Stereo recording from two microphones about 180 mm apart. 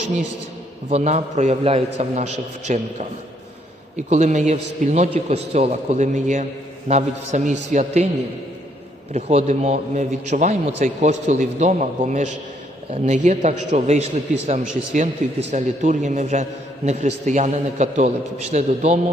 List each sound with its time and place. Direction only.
0.9 s a man's voice: 35° right (ahead or behind)
9.1 s a man's voice: 35° right (ahead or behind)